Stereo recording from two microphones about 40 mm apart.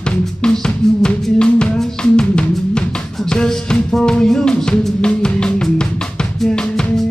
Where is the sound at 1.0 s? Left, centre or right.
Left.